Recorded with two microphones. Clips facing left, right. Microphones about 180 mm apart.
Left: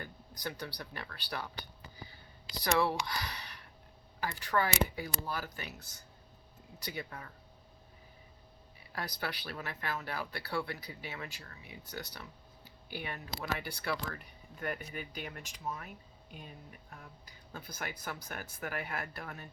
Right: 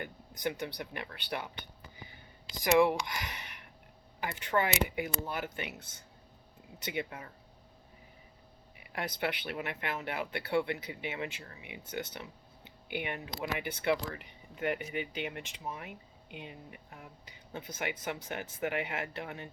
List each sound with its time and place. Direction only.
0.0 s speech: 25° right (ahead or behind)
2.7 s speech: 15° right (ahead or behind)
3.1 s a sound: 20° right (ahead or behind)
4.2 s speech: 20° right (ahead or behind)
9.0 s speech: 25° right (ahead or behind)
14.9 s speech: 80° right
15.3 s speech: 20° right (ahead or behind)
16.3 s speech: 85° right
17.5 s speech: 25° right (ahead or behind)